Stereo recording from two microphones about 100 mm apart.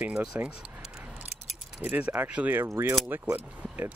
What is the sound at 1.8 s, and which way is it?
Speech, 15° right (ahead or behind).